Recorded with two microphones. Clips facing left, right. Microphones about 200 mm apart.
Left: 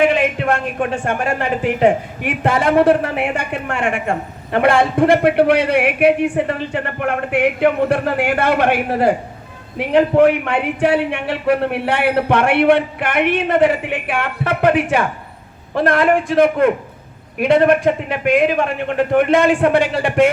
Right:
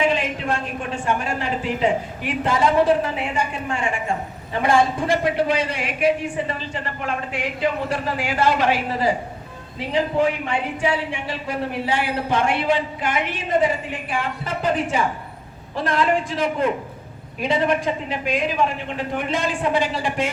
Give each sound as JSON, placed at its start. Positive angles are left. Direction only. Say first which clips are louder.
{"t": 0.0, "sound": "a man's voice", "louder": "left 6 dB", "side_deg": 60}